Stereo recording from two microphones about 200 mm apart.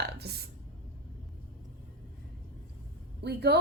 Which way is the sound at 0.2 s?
50° right (ahead or behind).